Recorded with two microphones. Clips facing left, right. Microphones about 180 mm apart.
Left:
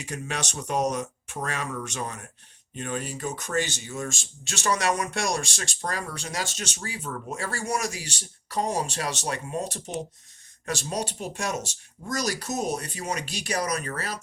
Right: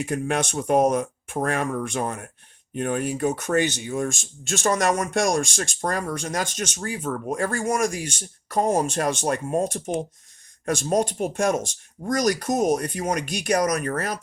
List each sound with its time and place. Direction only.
0.0 s speech: 55° right (ahead or behind)